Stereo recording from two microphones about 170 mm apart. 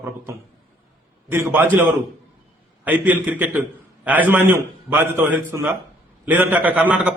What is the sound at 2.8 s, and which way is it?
A man's voice, 10° right (ahead or behind).